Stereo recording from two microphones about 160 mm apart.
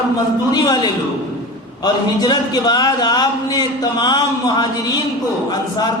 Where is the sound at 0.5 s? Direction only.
25° left (ahead or behind).